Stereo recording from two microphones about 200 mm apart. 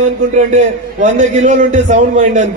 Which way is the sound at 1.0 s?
40° right (ahead or behind).